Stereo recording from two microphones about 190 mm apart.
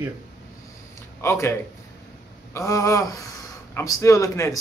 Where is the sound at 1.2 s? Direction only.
15° left (ahead or behind).